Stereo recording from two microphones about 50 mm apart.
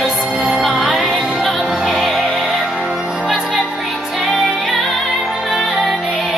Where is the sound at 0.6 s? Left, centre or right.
Centre.